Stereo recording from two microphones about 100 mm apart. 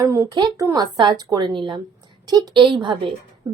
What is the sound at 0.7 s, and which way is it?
A woman's voice, 45° right (ahead or behind).